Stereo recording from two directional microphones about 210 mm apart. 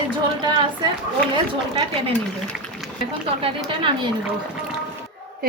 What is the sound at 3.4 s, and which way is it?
Speech, 25° right (ahead or behind).